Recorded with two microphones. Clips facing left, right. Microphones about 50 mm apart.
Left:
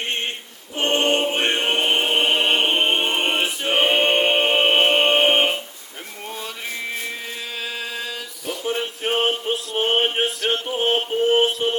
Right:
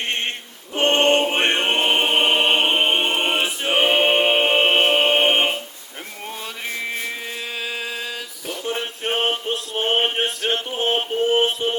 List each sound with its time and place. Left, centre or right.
0.8 s music: right
2.5 s choir: centre
7.6 s male singing: centre
9.0 s a sound: centre
10.2 s male singing: centre
10.5 s music: centre